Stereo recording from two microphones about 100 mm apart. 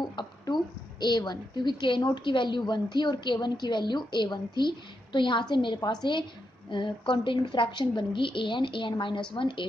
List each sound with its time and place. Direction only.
0.0 s a woman's voice: 50° left (ahead or behind)